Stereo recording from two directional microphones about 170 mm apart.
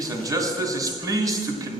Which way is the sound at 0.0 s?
20° right (ahead or behind).